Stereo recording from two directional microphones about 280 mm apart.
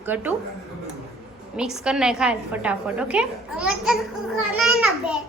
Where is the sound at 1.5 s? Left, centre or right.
Centre.